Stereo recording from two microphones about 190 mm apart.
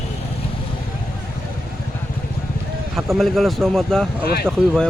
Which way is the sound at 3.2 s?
Centre (ahead or behind).